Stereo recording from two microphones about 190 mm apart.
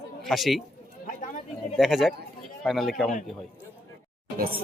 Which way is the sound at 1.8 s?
Centre (ahead or behind).